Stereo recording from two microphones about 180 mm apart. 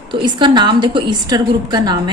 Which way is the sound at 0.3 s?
25° right (ahead or behind).